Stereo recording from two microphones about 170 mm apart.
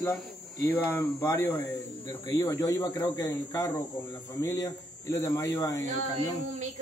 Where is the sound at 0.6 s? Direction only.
20° left (ahead or behind).